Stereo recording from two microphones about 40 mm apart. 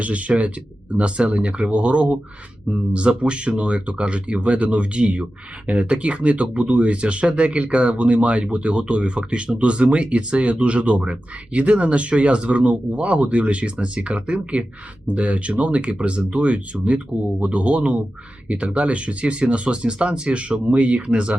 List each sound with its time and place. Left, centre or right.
0.0 s speech: right